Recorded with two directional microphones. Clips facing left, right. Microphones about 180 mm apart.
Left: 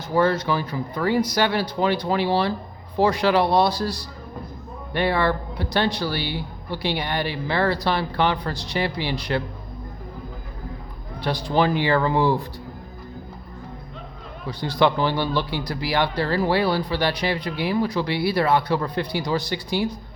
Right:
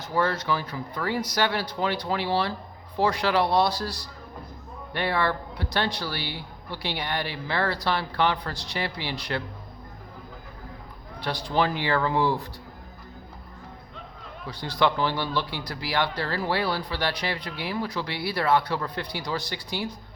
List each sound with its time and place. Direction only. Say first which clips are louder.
0.1 s speech: left 5 dB; 15° left (ahead or behind)
11.2 s speech: left 4 dB; 15° left (ahead or behind)
14.4 s speech: left 4 dB; 15° left (ahead or behind)